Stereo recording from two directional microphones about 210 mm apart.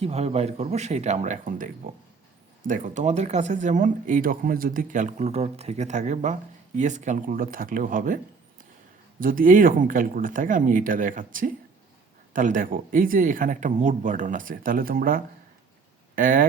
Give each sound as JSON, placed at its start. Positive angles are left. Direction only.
{"t": 0.0, "sound": "speech", "side_deg": -30}
{"t": 9.2, "sound": "speech", "side_deg": -40}